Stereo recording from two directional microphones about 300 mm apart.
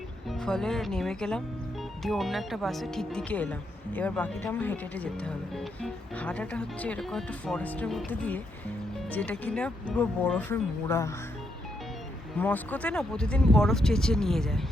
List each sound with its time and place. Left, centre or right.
0.3 s speech: centre
12.4 s speech: centre